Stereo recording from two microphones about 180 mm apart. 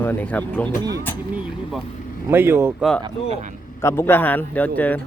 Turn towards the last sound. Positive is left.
turn(degrees=10)  # may be behind; listen again after turning